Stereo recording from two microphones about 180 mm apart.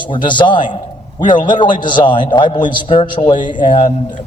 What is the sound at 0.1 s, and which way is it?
A man's voice, 25° left (ahead or behind).